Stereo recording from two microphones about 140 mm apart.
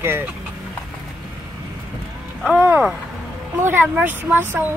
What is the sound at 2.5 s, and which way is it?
Speech, 10° right (ahead or behind).